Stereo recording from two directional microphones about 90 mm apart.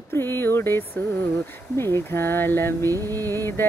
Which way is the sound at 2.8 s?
40° right (ahead or behind).